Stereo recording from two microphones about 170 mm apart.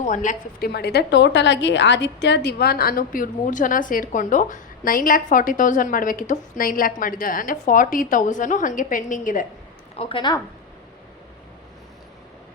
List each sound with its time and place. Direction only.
0.0 s a woman's voice: 50° left (ahead or behind)
0.7 s a woman's voice: 75° left (ahead or behind); by 9.5 s 50° left (ahead or behind)
9.9 s a woman's voice: 35° left (ahead or behind)